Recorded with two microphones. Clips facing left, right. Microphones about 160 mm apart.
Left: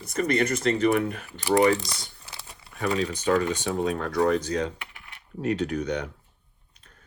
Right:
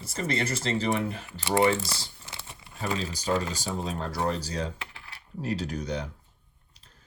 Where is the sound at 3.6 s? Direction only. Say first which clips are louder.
Left 6 dB; 65° left (ahead or behind).